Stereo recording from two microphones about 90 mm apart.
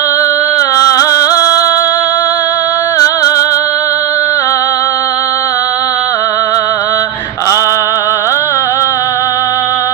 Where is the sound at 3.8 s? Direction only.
30° left (ahead or behind).